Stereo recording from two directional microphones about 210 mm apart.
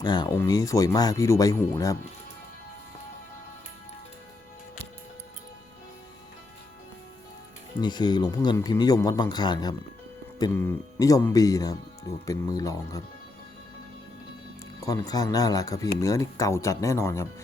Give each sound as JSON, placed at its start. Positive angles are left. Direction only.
{"t": 0.0, "sound": "speech", "side_deg": 20}
{"t": 7.8, "sound": "speech", "side_deg": 20}
{"t": 14.8, "sound": "speech", "side_deg": 15}